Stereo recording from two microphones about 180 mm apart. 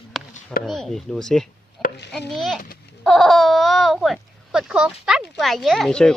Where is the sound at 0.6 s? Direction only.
Centre (ahead or behind).